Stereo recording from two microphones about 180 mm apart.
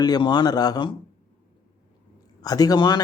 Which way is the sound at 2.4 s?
20° left (ahead or behind).